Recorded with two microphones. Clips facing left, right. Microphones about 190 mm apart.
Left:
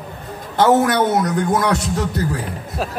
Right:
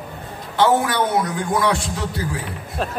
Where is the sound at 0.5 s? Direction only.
40° left (ahead or behind).